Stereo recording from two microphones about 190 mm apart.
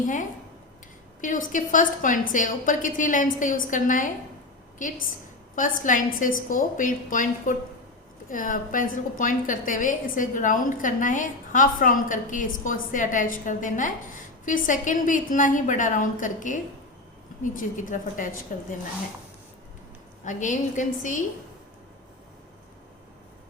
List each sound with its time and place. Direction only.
1.2 s a woman's voice: 45° left (ahead or behind)
20.2 s a woman's voice: 40° left (ahead or behind)